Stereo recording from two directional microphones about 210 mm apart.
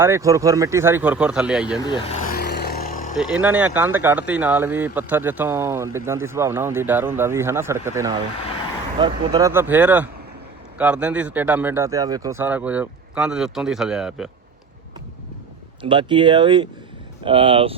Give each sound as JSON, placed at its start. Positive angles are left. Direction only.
{"t": 0.0, "sound": "speech", "side_deg": -15}
{"t": 1.8, "sound": "speech", "side_deg": 20}
{"t": 2.1, "sound": "vehicle", "side_deg": 40}
{"t": 3.2, "sound": "speech", "side_deg": -5}
{"t": 15.8, "sound": "speech", "side_deg": -25}